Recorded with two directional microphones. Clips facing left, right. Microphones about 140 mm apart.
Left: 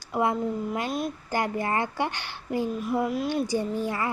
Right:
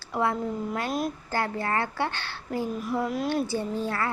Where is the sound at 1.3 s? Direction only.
15° left (ahead or behind).